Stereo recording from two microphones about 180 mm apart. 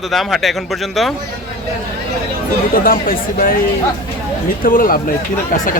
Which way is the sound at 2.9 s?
55° left (ahead or behind).